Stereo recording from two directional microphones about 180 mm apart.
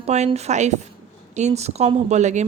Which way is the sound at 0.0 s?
40° right (ahead or behind).